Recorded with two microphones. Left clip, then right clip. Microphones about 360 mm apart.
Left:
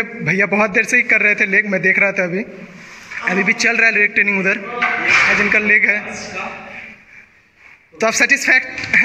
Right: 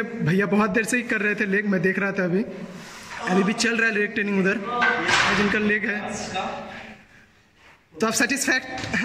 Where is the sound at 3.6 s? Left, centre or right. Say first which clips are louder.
Left 11 dB; left.